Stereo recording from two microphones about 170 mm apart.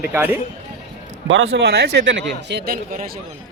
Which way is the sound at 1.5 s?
75° right (ahead or behind).